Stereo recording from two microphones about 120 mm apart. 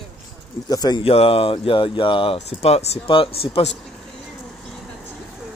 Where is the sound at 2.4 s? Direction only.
60° left (ahead or behind).